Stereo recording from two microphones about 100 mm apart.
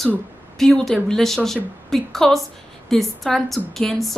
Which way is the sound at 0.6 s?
5° left (ahead or behind).